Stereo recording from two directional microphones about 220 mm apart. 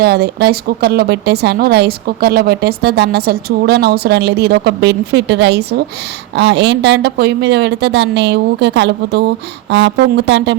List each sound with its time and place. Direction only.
0.0 s a woman's voice: 45° right (ahead or behind)